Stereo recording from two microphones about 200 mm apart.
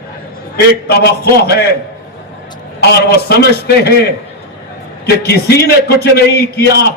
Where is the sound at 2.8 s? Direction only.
55° left (ahead or behind).